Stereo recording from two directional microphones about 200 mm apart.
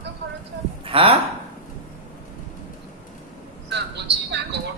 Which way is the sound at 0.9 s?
25° right (ahead or behind).